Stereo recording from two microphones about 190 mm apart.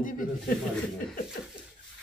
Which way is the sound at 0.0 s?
45° left (ahead or behind).